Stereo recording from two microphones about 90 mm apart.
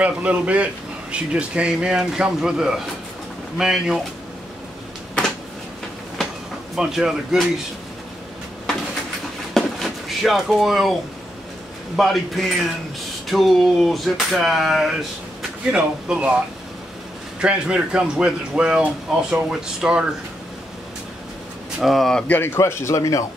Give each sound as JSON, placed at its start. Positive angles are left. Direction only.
{"t": 0.0, "sound": "a man's voice", "side_deg": -15}
{"t": 6.7, "sound": "speech", "side_deg": -5}
{"t": 9.5, "sound": "a sound", "side_deg": 0}
{"t": 12.0, "sound": "a man's voice", "side_deg": 0}
{"t": 17.4, "sound": "a man's voice", "side_deg": -10}
{"t": 21.7, "sound": "speech", "side_deg": 0}
{"t": 22.3, "sound": "speech", "side_deg": 25}